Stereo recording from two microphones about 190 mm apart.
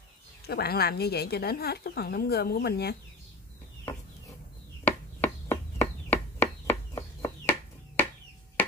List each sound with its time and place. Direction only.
0.5 s speech: 55° left (ahead or behind)
4.8 s chop: 10° left (ahead or behind)